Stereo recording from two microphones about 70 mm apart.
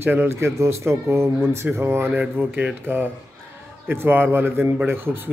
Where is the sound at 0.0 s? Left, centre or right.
Right.